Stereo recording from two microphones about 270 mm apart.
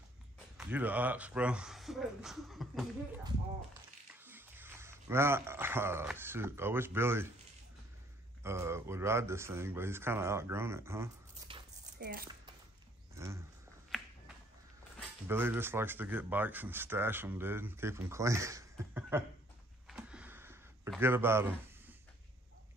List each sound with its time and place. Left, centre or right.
0.6 s speech: centre
4.1 s speech: centre
8.4 s speech: centre
12.0 s speech: right
13.1 s a sound: centre
13.8 s finger snapping: centre
15.2 s speech: centre
19.9 s a sound: centre
21.0 s speech: centre